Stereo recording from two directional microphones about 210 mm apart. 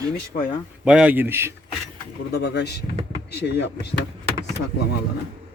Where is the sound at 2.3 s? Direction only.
50° left (ahead or behind).